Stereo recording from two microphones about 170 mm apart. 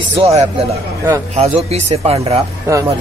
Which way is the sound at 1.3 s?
40° right (ahead or behind).